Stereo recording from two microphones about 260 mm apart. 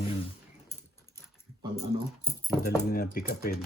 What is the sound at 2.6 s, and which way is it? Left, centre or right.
Speech, left.